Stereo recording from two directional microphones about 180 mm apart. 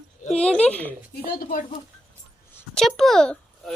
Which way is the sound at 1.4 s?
50° left (ahead or behind).